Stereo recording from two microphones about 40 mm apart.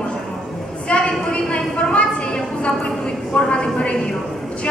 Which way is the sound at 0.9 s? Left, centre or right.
Left.